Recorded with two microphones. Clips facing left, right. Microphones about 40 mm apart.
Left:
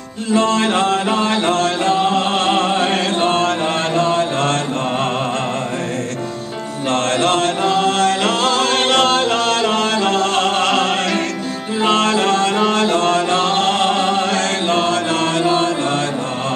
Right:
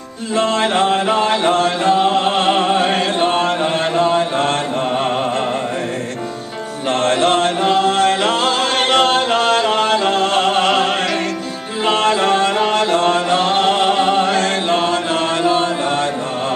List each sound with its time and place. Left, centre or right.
0.4 s mantra: centre
1.1 s music: centre
3.2 s chant: centre
6.9 s chant: centre
11.9 s music: centre
12.5 s music: centre